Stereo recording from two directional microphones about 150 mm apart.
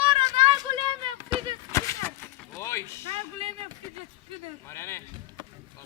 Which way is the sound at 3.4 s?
40° right (ahead or behind).